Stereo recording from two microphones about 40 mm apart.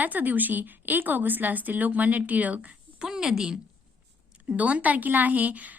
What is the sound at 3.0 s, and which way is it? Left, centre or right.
Speech, centre.